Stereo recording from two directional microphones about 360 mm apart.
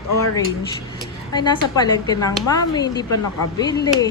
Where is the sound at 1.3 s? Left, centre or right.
Centre.